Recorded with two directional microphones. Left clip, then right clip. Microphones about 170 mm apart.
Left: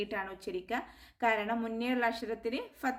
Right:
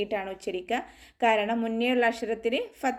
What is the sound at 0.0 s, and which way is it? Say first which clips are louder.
A woman's voice: right 6 dB; 10° right (ahead or behind).